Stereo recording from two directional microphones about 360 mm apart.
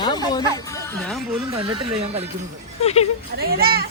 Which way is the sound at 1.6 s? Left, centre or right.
Right.